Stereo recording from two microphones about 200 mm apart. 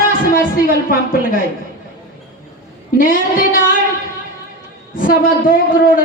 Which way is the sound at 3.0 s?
45° left (ahead or behind).